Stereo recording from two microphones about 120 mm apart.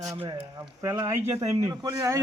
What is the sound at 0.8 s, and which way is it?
Speech, 30° right (ahead or behind).